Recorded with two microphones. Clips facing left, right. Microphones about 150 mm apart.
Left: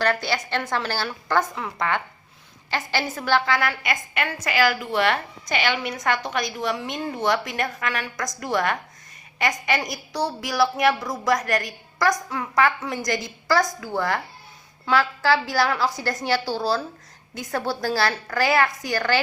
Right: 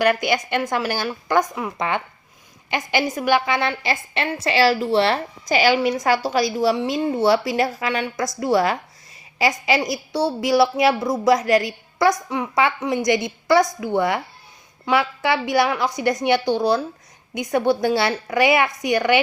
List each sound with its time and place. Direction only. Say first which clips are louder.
0.0 s a woman's voice: right 5 dB; 15° right (ahead or behind)